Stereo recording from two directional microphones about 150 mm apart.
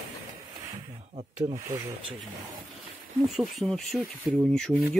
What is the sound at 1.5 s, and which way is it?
Speech, 25° right (ahead or behind).